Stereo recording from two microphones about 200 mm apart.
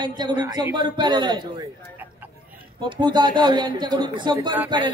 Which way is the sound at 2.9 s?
20° right (ahead or behind).